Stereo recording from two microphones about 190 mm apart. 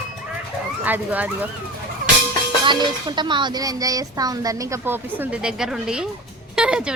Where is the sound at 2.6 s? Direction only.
25° right (ahead or behind).